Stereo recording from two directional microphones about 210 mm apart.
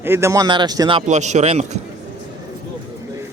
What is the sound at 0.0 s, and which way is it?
Speech, 10° right (ahead or behind).